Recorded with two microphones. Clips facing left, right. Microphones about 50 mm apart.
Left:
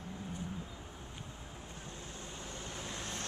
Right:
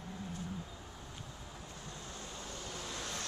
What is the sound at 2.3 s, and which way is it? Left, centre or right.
Vehicle, left.